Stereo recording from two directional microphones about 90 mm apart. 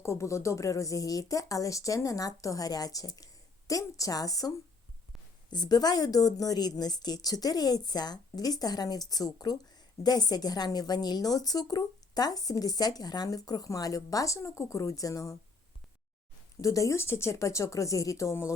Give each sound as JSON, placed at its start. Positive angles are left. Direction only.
{"t": 0.0, "sound": "a woman's voice", "side_deg": 35}
{"t": 16.6, "sound": "a woman's voice", "side_deg": 40}